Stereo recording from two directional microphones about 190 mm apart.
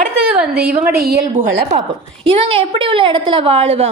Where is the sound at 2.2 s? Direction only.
30° right (ahead or behind).